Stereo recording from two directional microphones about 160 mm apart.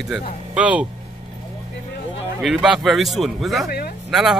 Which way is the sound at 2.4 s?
Centre (ahead or behind).